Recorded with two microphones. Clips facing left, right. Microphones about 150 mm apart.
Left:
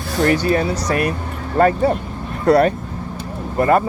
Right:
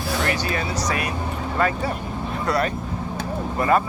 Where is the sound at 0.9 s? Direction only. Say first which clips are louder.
Left 5 dB; 50° left (ahead or behind).